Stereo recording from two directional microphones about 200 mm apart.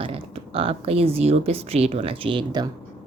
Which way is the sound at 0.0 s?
30° right (ahead or behind).